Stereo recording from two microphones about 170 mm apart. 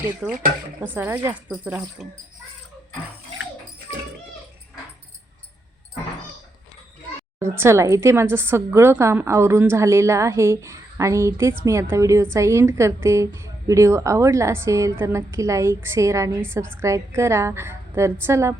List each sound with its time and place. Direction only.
0.2 s a child's voice: 5° right (ahead or behind)
2.0 s a child's voice: centre (ahead or behind)
7.3 s a woman's voice: 15° right (ahead or behind)